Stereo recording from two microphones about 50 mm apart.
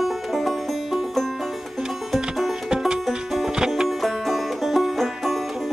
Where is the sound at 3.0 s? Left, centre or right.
Centre.